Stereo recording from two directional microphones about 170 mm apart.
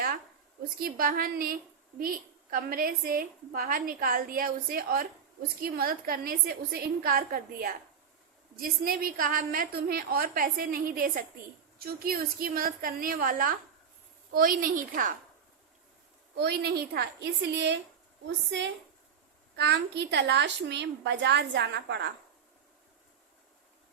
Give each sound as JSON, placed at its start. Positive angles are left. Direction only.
{"t": 0.8, "sound": "a woman's voice", "side_deg": -60}
{"t": 16.3, "sound": "a woman's voice", "side_deg": -70}
{"t": 17.5, "sound": "a woman's voice", "side_deg": -90}
{"t": 19.5, "sound": "a woman's voice", "side_deg": -80}